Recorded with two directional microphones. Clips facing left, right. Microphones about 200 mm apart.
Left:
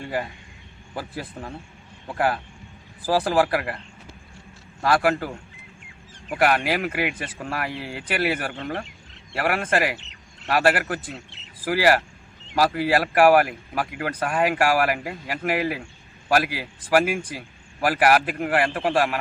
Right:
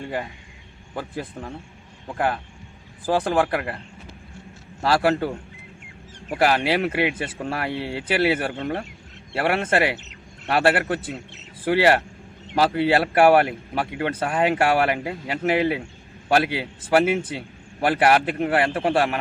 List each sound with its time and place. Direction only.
0.9 s speech: 5° left (ahead or behind)
4.8 s speech: 25° right (ahead or behind)
6.3 s speech: 30° right (ahead or behind)